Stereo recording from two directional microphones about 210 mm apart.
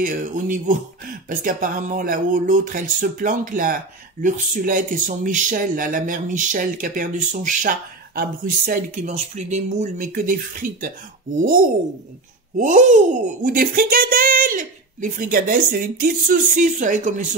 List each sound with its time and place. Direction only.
0.0 s speech: 40° right (ahead or behind)